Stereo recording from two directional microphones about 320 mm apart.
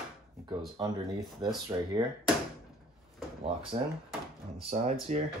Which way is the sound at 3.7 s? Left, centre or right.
Centre.